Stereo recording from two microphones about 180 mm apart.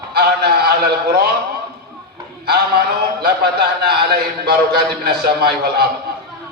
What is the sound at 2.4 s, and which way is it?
A man's voice, 60° right (ahead or behind).